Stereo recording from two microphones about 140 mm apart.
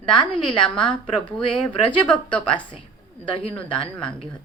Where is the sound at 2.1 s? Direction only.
35° left (ahead or behind).